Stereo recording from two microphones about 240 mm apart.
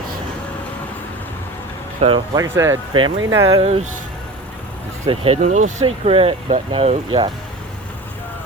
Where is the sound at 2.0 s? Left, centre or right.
Right.